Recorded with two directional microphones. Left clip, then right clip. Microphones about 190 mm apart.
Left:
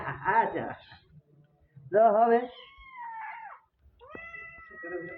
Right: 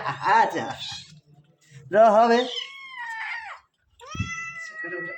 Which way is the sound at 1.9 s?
75° right (ahead or behind).